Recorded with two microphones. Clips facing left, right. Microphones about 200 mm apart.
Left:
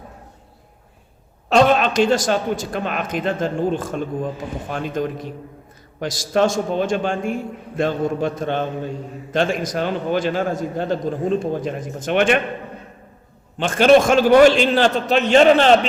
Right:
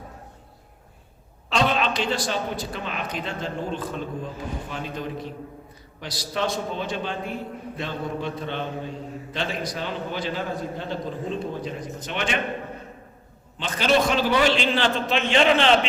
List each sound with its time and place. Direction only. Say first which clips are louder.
1.5 s a sound: left 8 dB; 45° left (ahead or behind)
2.2 s a man's voice: left 7 dB; 50° left (ahead or behind)
6.0 s a man's voice: left 10 dB; 45° left (ahead or behind)
13.6 s a man's voice: left 9 dB; 55° left (ahead or behind)